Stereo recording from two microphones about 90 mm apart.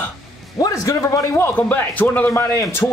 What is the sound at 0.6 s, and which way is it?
Speech, 35° left (ahead or behind).